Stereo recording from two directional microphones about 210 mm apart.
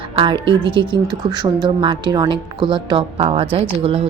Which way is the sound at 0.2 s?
25° right (ahead or behind).